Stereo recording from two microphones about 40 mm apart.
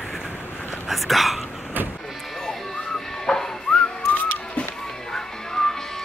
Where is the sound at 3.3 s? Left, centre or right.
Centre.